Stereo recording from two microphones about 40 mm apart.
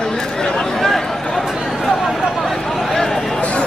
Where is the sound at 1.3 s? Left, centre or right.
Centre.